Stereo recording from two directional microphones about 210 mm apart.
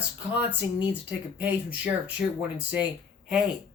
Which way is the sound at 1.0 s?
5° right (ahead or behind).